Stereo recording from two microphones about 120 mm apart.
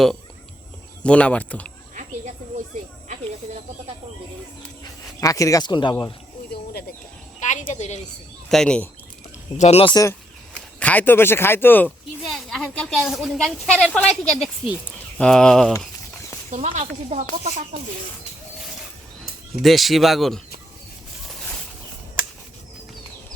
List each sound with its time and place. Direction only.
1.0 s a woman's voice: 10° left (ahead or behind)
4.8 s speech: 30° left (ahead or behind)
7.3 s a sound: 90° left
7.7 s a woman's voice: 70° left (ahead or behind)
8.4 s a woman's voice: 5° left (ahead or behind)
9.6 s speech: 60° left (ahead or behind)
9.9 s speech: 30° left (ahead or behind)
10.5 s speech: 10° left (ahead or behind)
12.2 s a sound: centre (ahead or behind)
13.0 s speech: 5° right (ahead or behind)
13.7 s a woman's voice: 10° left (ahead or behind)
16.5 s speech: 75° right (ahead or behind)
19.6 s speech: centre (ahead or behind)